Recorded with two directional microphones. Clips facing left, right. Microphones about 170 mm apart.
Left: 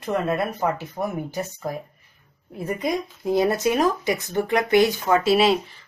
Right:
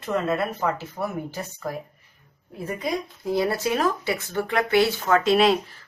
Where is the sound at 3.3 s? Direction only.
20° left (ahead or behind).